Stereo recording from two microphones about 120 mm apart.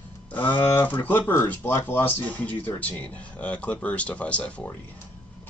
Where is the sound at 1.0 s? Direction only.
15° left (ahead or behind).